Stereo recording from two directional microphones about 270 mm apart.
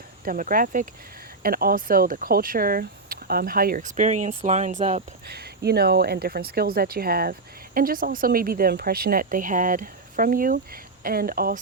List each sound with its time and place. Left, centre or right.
0.3 s speech: right